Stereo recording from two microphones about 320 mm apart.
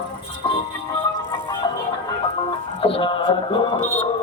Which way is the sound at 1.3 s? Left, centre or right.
Centre.